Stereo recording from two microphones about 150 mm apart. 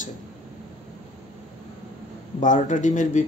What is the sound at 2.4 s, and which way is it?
Speech, 55° left (ahead or behind).